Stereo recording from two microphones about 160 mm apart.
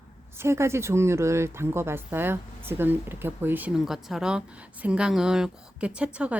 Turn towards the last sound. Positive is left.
turn(degrees=-5)  # may be behind; listen again after turning